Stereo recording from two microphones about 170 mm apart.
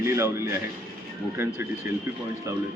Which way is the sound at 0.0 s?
15° right (ahead or behind).